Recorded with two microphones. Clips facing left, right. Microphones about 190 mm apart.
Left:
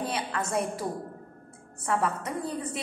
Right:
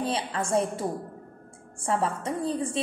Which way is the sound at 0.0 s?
30° right (ahead or behind).